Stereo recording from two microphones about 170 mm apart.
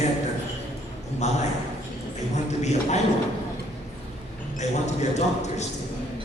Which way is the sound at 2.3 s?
40° left (ahead or behind).